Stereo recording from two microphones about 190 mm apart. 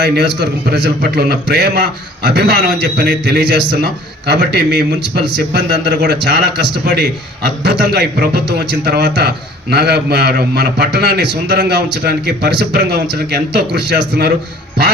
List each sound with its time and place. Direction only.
0.0 s a man's voice: 60° right (ahead or behind)